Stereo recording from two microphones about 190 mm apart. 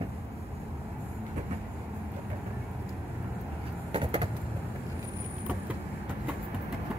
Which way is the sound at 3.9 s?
30° right (ahead or behind).